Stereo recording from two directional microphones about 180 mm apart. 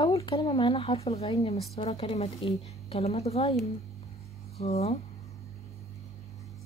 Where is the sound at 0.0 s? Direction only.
25° left (ahead or behind).